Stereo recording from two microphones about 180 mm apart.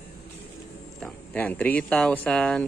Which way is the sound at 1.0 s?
10° left (ahead or behind).